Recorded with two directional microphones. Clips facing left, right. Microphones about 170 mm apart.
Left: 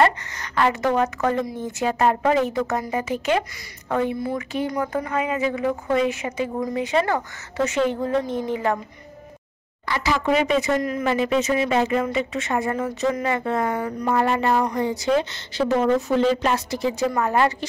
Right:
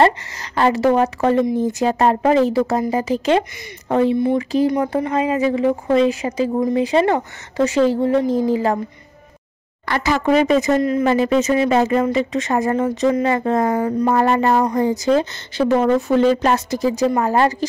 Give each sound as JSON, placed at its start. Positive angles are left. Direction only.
{"t": 0.0, "sound": "a sound", "side_deg": -30}
{"t": 0.9, "sound": "a woman's voice", "side_deg": -30}
{"t": 8.3, "sound": "speech", "side_deg": -90}
{"t": 9.8, "sound": "speech", "side_deg": -55}
{"t": 15.5, "sound": "speech", "side_deg": -55}